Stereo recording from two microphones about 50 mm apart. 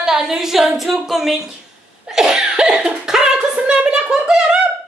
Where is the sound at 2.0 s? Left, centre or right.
Centre.